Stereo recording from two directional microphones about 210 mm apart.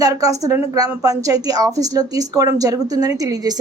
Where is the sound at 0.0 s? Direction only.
15° right (ahead or behind).